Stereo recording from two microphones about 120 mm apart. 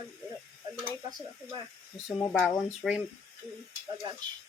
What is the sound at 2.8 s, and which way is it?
Speech, centre (ahead or behind).